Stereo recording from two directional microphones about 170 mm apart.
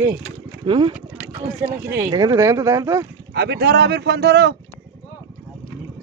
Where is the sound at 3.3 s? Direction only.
75° right (ahead or behind).